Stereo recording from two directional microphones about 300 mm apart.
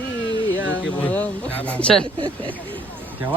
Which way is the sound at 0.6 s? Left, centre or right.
Left.